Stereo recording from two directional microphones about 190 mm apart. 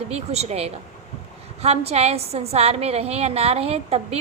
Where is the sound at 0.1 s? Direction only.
35° right (ahead or behind).